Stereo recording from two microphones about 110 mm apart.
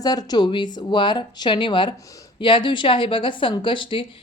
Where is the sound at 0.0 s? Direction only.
35° left (ahead or behind).